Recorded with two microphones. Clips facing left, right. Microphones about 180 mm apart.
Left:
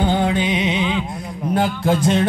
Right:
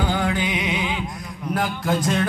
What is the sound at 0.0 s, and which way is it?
Music, 25° left (ahead or behind).